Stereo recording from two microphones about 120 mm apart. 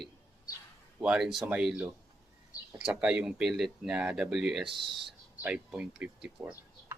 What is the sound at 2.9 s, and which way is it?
Speech, 5° right (ahead or behind).